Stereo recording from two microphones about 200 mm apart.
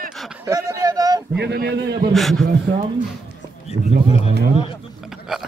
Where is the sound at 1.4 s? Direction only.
55° right (ahead or behind).